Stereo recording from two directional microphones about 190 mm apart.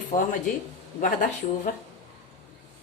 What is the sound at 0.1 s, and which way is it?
Speech, 30° left (ahead or behind).